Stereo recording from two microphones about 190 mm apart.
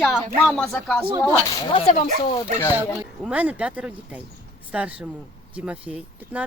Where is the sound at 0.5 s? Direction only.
Centre (ahead or behind).